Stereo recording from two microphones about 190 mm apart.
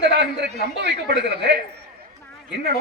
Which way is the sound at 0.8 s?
60° right (ahead or behind).